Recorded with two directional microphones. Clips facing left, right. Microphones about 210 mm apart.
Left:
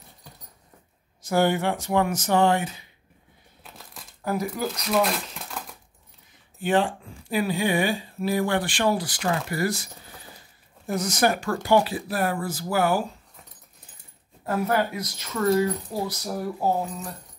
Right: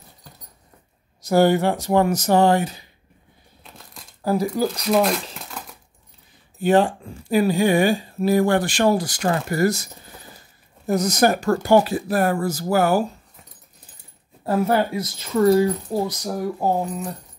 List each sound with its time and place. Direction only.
1.2 s speech: 40° right (ahead or behind)
3.6 s a sound: centre (ahead or behind)
4.2 s speech: 30° right (ahead or behind)
5.0 s a sound: centre (ahead or behind)
6.6 s speech: 40° right (ahead or behind)
10.9 s speech: 40° right (ahead or behind)
14.4 s speech: 30° right (ahead or behind)